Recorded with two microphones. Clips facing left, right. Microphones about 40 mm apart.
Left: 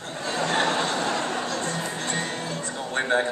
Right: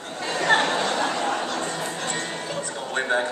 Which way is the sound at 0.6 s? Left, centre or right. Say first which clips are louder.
Right 1 dB; right.